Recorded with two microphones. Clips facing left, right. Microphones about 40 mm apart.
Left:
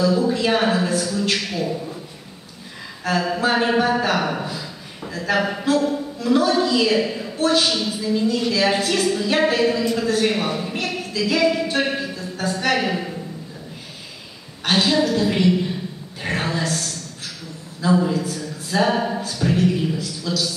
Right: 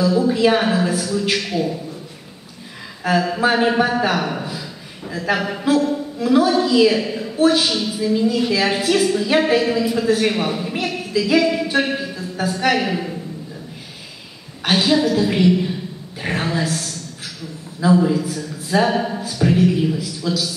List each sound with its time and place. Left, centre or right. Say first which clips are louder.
0.0 s a woman's voice: right 3 dB; centre
3.0 s a woman's voice: right 3 dB; centre
14.6 s a woman's voice: right 2 dB; centre
18.0 s speech: right 3 dB; centre